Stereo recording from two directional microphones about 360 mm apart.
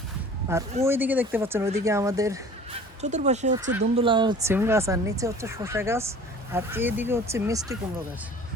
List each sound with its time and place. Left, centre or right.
0.5 s speech: centre
3.0 s speech: centre